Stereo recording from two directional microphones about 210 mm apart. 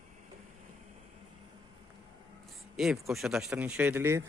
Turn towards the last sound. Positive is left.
turn(degrees=-10)  # may be behind; listen again after turning